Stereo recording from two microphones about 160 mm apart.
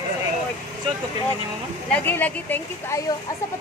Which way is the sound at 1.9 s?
10° left (ahead or behind).